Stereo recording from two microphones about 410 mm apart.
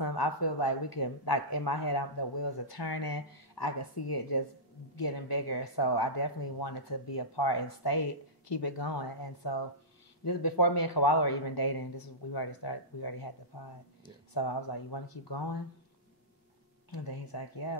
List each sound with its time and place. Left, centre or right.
0.0 s speech: left
16.9 s speech: left